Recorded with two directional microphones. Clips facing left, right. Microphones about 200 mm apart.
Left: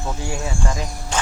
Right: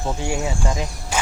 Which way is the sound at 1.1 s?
10° right (ahead or behind).